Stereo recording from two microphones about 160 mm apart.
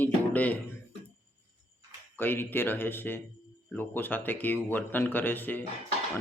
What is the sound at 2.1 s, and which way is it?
A man's voice, 15° left (ahead or behind).